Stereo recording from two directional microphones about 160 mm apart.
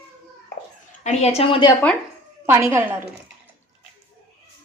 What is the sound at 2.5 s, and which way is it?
Speech, 15° right (ahead or behind).